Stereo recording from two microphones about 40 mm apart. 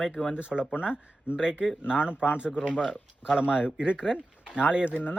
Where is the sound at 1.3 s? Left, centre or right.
Centre.